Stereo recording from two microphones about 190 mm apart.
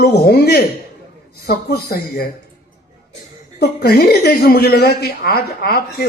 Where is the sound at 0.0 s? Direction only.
60° left (ahead or behind).